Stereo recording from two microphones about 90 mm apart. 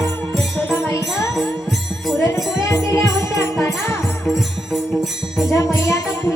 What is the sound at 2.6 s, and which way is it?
Music, 35° left (ahead or behind).